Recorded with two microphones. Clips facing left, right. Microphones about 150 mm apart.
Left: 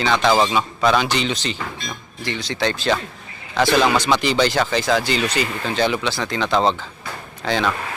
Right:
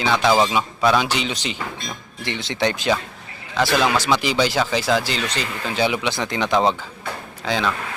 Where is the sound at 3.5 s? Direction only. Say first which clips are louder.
Left 2 dB; centre (ahead or behind).